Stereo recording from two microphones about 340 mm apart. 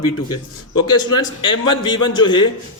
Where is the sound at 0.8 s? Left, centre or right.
Centre.